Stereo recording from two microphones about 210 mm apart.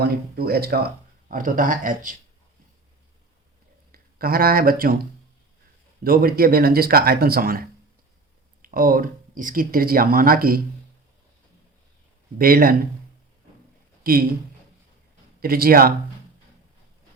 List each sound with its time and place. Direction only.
0.0 s speech: 50° right (ahead or behind)
3.9 s speech: 45° right (ahead or behind)
6.0 s speech: 45° right (ahead or behind)
8.6 s speech: 45° right (ahead or behind)
12.4 s speech: 45° right (ahead or behind)
14.0 s speech: 45° right (ahead or behind)
15.4 s speech: 45° right (ahead or behind)